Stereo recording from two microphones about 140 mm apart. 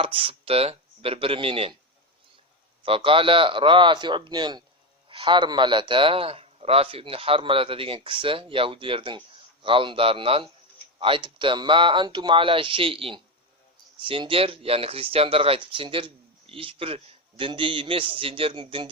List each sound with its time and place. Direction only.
0.0 s speech: 40° right (ahead or behind)
2.8 s speech: 40° right (ahead or behind)